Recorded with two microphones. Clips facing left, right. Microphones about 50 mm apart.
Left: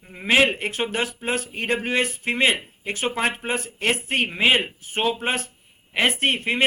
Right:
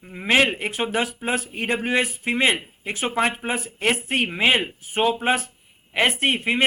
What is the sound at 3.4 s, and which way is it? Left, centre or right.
Speech, centre.